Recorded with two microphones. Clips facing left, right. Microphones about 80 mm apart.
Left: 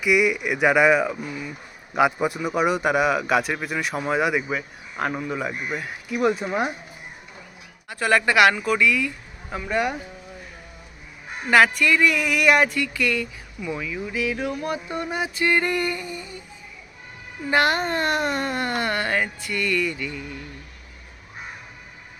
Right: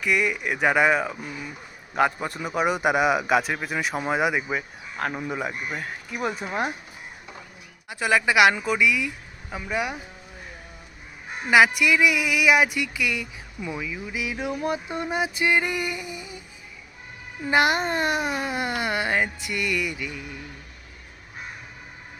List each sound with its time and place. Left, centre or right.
0.0 s speech: centre
7.9 s speech: centre
11.4 s speech: centre
17.5 s speech: centre